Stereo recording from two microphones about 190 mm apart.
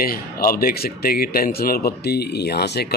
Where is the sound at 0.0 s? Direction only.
50° left (ahead or behind).